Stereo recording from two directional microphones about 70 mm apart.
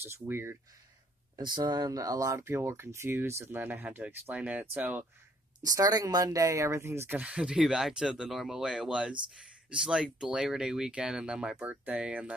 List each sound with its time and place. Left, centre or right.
0.0 s speech: right
1.4 s speech: right
5.6 s speech: right
7.2 s speech: centre
11.7 s speech: right